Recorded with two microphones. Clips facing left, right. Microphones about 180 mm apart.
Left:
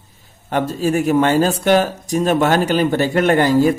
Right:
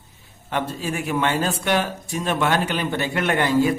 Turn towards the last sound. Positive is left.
turn(degrees=40)  # may be behind; listen again after turning